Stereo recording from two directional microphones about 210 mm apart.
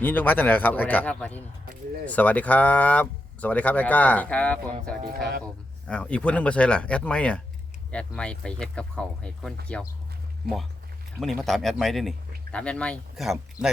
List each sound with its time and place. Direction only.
0.0 s speech: 10° left (ahead or behind)
5.0 s speech: 45° right (ahead or behind)
5.9 s speech: 5° left (ahead or behind)
11.2 s speech: centre (ahead or behind)